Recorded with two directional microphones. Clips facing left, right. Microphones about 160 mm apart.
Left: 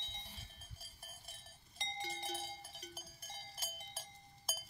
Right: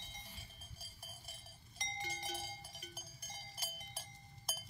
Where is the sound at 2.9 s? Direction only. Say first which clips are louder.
Left 1 dB; centre (ahead or behind).